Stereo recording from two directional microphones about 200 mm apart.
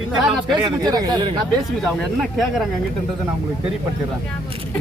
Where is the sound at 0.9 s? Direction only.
20° right (ahead or behind).